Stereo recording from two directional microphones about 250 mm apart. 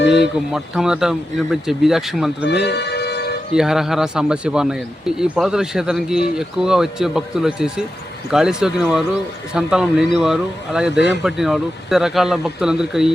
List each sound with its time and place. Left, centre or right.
0.0 s a sound: left
0.5 s speech: centre
2.5 s music: left
3.5 s speech: centre